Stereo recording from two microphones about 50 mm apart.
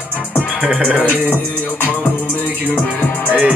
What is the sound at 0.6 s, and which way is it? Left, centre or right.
Music, right.